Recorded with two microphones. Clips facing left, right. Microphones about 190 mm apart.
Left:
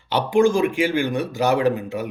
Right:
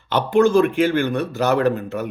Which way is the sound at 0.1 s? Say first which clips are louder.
Right 2 dB; 10° left (ahead or behind).